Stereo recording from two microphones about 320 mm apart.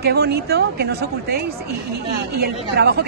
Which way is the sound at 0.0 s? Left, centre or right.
Right.